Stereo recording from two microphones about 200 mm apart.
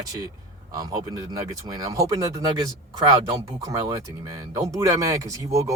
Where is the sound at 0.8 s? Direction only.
15° right (ahead or behind).